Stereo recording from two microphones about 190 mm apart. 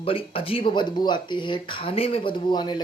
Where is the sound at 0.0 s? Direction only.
30° left (ahead or behind).